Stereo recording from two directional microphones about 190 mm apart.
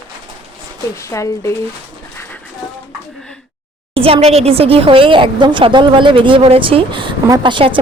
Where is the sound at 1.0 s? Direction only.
15° left (ahead or behind).